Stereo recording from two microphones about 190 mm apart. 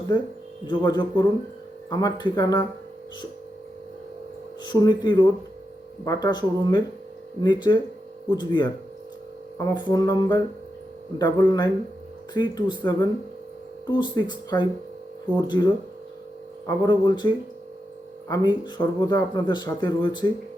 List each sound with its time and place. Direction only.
0.7 s speech: 25° left (ahead or behind)
4.6 s speech: 20° left (ahead or behind)
18.3 s speech: 25° left (ahead or behind)